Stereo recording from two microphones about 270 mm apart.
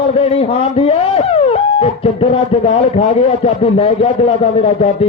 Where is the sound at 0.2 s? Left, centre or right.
Left.